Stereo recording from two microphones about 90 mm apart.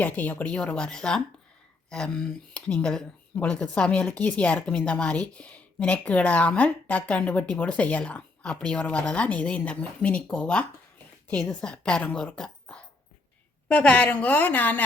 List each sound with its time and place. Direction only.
0.0 s a woman's voice: 20° left (ahead or behind)